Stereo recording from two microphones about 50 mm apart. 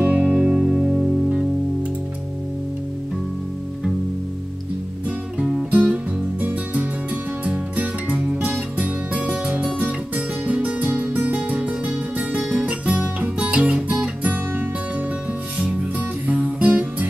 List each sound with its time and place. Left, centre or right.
0.0 s music: right
5.4 s music: centre
5.7 s music: right
13.6 s guitar: right
14.0 s music: right
16.3 s music: right